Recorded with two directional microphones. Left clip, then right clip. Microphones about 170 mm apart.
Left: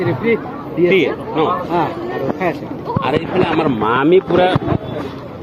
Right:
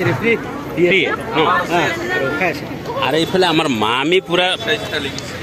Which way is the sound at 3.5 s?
60° right (ahead or behind).